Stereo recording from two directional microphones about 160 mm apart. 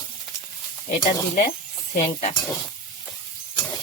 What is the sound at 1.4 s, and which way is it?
Snake, 65° left (ahead or behind).